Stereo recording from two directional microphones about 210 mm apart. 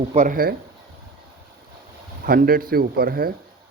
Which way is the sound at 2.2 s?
45° right (ahead or behind).